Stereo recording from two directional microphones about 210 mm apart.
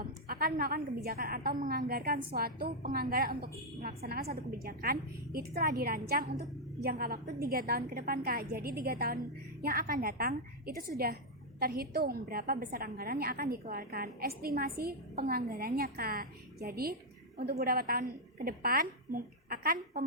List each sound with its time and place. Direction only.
0.0 s a woman's voice: 45° right (ahead or behind)